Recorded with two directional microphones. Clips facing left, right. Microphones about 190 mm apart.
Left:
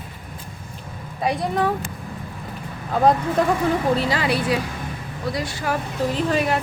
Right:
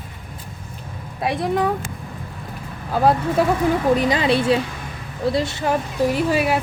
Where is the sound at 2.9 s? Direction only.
5° right (ahead or behind).